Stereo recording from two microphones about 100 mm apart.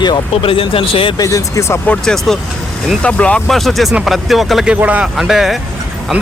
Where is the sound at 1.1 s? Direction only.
35° left (ahead or behind).